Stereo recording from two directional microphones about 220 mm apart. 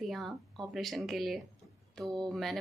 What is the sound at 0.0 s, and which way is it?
Speech, centre (ahead or behind).